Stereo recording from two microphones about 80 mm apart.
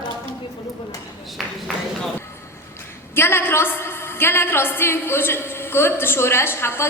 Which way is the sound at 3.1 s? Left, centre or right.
Left.